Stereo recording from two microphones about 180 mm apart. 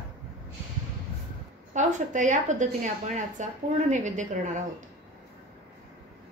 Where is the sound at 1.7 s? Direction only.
40° right (ahead or behind).